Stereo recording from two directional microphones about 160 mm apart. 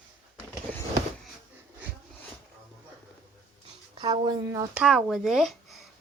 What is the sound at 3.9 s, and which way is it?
Speech, 30° right (ahead or behind).